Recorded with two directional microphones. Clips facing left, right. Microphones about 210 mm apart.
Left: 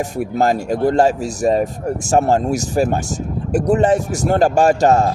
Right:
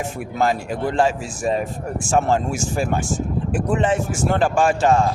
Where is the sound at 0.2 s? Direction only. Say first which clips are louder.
Left 4 dB; 40° left (ahead or behind).